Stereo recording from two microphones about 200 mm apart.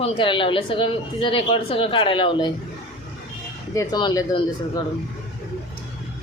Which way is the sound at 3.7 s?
20° left (ahead or behind).